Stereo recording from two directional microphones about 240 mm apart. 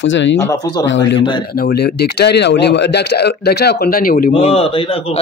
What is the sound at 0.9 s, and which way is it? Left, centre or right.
A man's voice, left.